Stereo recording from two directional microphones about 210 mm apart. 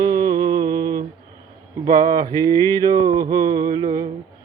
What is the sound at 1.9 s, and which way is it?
Mantra, 20° right (ahead or behind).